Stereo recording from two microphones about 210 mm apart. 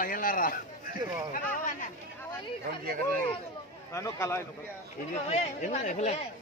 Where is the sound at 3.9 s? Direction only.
15° left (ahead or behind).